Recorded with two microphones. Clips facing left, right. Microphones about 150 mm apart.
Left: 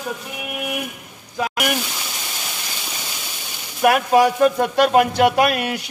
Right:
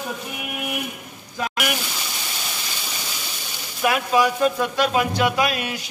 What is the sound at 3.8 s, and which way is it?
Speech, 55° left (ahead or behind).